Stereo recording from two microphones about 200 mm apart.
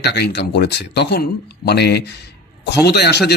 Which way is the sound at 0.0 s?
55° left (ahead or behind).